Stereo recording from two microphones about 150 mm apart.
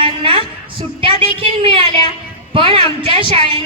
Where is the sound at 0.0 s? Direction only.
40° right (ahead or behind).